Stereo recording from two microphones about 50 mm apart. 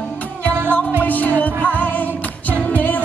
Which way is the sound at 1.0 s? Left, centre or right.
Left.